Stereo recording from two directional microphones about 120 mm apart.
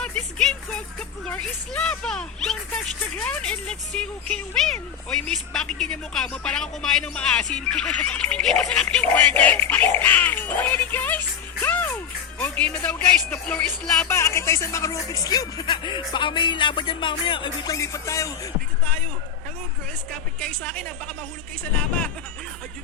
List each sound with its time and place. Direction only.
0.0 s speech: 5° left (ahead or behind)
11.6 s music: 15° left (ahead or behind)
12.4 s speech: 10° left (ahead or behind)
20.4 s speech: 10° left (ahead or behind)